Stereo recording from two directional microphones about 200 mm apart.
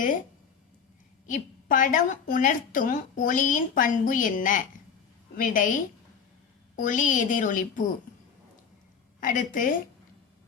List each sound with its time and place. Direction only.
1.3 s a woman's voice: 40° left (ahead or behind)
6.7 s a woman's voice: 40° left (ahead or behind)
9.2 s a woman's voice: 40° left (ahead or behind)